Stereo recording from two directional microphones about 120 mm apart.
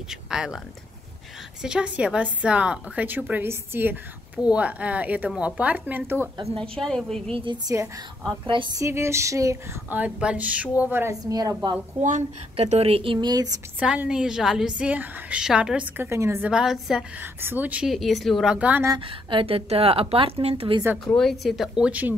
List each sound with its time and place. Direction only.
0.1 s speech: 5° right (ahead or behind)
1.6 s a woman's voice: 5° right (ahead or behind)
6.6 s speech: 5° left (ahead or behind)
7.2 s a woman's voice: 50° right (ahead or behind)
7.6 s a sound: 25° right (ahead or behind)
9.8 s a woman's voice: 10° right (ahead or behind); by 11.7 s 30° right (ahead or behind)
12.0 s a woman's voice: 80° right; by 13.5 s 35° right (ahead or behind)
13.7 s a woman's voice: 10° right (ahead or behind)
16.1 s a sound: 20° right (ahead or behind)
16.4 s speech: 5° right (ahead or behind)
17.2 s a woman's voice: 15° right (ahead or behind)
17.9 s speech: centre (ahead or behind)
18.9 s a woman's voice: 45° right (ahead or behind)
21.2 s speech: centre (ahead or behind)